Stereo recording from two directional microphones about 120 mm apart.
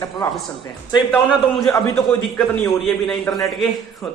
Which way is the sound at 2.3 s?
15° left (ahead or behind).